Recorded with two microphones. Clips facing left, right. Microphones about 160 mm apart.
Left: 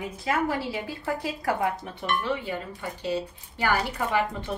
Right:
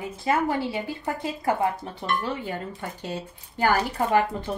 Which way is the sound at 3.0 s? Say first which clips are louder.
Left 4 dB; 50° right (ahead or behind).